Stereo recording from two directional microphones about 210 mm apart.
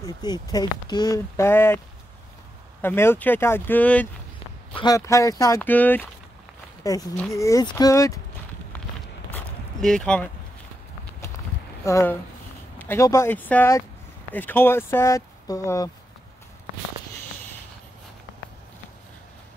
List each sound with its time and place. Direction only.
0.0 s speech: 20° left (ahead or behind)
2.8 s speech: 10° left (ahead or behind)
9.3 s zipper: 5° left (ahead or behind)
11.8 s speech: 10° left (ahead or behind)